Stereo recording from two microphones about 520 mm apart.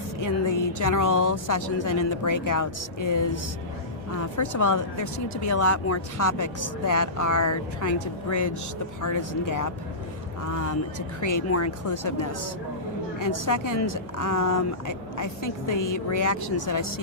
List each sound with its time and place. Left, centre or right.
0.2 s speech: left